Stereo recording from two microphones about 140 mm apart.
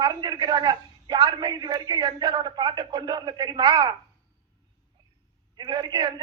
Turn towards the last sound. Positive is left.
turn(degrees=-30)  # may be behind; listen again after turning